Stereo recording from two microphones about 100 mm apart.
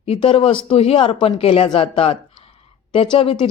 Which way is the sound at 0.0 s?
75° left (ahead or behind).